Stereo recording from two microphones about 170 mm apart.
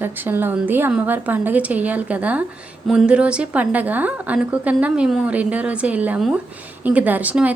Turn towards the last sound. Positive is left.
turn(degrees=-10)  # may be behind; listen again after turning